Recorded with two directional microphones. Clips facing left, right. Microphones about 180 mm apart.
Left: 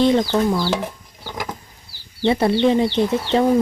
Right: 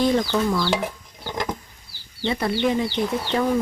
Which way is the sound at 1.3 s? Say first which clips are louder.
Right 2 dB; centre (ahead or behind).